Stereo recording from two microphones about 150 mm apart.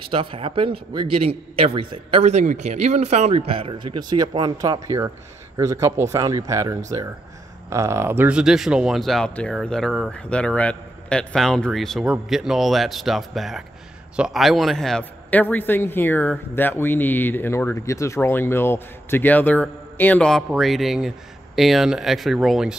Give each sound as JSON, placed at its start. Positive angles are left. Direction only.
{"t": 0.0, "sound": "a man's voice", "side_deg": -35}